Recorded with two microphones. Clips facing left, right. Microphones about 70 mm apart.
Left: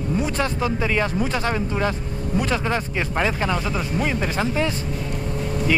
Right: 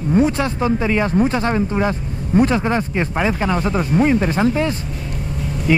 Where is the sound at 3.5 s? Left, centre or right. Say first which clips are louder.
Right 7 dB; right.